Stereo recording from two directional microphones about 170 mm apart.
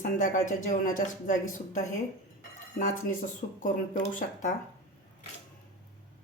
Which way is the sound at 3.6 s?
50° left (ahead or behind).